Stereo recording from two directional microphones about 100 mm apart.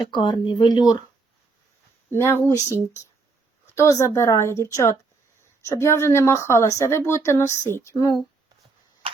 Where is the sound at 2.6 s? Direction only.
30° right (ahead or behind).